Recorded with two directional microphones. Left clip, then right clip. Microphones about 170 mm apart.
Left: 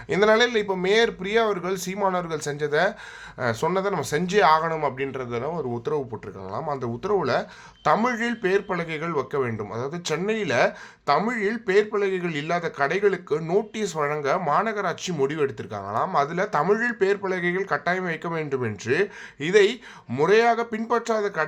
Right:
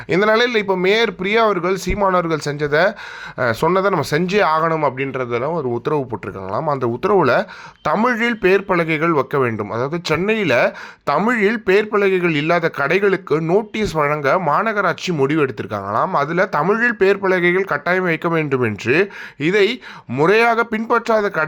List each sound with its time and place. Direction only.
0.1 s speech: 40° right (ahead or behind)